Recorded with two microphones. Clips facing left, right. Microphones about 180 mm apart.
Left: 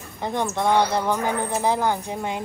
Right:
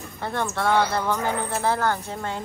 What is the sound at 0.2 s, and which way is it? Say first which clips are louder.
Speech: left 2 dB; 15° left (ahead or behind).